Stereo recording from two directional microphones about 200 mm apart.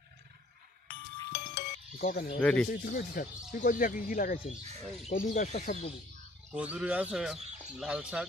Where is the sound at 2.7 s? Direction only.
45° left (ahead or behind).